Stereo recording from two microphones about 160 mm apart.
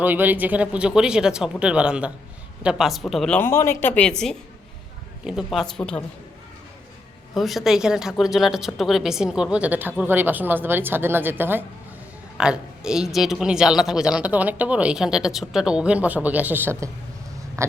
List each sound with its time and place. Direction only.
0.0 s a woman's voice: 10° right (ahead or behind); by 4.1 s 10° left (ahead or behind)
5.2 s speech: 5° right (ahead or behind)
7.3 s speech: centre (ahead or behind)
17.6 s a sound: 15° right (ahead or behind)